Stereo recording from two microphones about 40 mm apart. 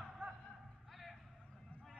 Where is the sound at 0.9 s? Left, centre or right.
Centre.